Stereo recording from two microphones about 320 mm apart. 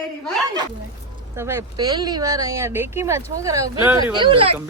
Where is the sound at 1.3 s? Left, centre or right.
Centre.